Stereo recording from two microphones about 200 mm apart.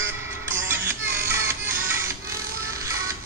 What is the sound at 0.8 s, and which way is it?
Music, 10° right (ahead or behind).